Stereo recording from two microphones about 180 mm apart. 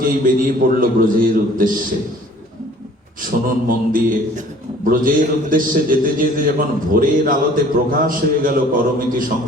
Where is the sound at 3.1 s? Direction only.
50° right (ahead or behind).